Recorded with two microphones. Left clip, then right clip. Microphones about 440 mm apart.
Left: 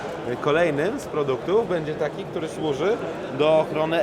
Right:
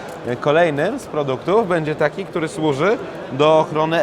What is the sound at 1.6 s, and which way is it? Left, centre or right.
Speech, right.